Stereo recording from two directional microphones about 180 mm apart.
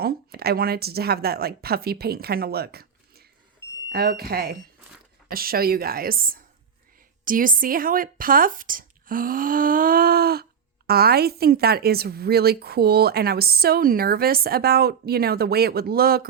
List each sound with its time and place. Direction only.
0.0 s a woman's voice: 60° right (ahead or behind)